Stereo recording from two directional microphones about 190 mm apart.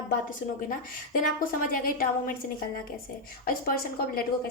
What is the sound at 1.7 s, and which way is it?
Speech, 50° left (ahead or behind).